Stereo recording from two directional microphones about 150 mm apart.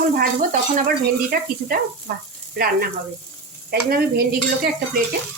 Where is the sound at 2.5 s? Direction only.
85° right.